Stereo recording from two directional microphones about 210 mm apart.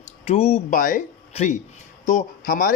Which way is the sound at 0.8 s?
40° left (ahead or behind).